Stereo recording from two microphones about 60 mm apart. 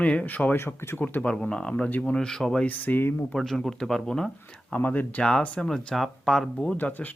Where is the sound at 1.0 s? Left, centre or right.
Left.